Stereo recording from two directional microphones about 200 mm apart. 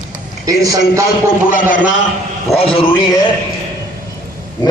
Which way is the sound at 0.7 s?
15° right (ahead or behind).